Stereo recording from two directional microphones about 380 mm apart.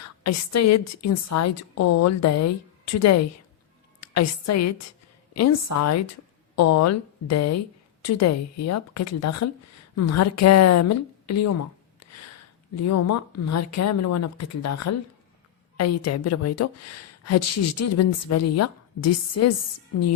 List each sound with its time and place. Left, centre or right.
0.0 s a woman's voice: left